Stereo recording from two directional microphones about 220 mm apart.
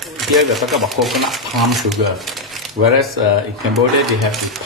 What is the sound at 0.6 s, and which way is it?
Speech, centre (ahead or behind).